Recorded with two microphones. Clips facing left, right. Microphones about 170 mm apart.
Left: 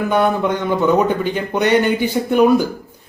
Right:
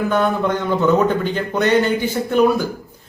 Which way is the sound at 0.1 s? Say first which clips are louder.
Left 4 dB; 15° left (ahead or behind).